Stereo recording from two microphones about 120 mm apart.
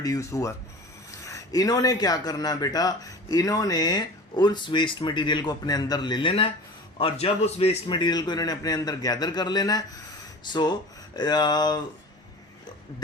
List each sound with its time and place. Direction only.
0.0 s speech: 25° left (ahead or behind); by 6.5 s 45° left (ahead or behind)
7.0 s a man's voice: 60° left (ahead or behind)
7.9 s speech: 40° left (ahead or behind)